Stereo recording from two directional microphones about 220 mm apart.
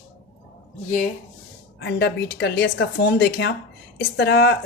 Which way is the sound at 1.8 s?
50° left (ahead or behind).